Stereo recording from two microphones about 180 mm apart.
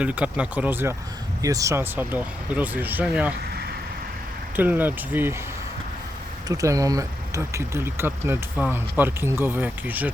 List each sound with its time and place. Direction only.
0.0 s speech: 5° right (ahead or behind)
3.5 s vehicle: 60° right (ahead or behind)
4.5 s speech: 10° right (ahead or behind)
6.5 s speech: 20° right (ahead or behind)